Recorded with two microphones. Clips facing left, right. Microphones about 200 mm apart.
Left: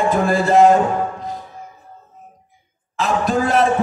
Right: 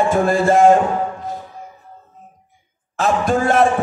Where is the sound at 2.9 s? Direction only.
45° right (ahead or behind).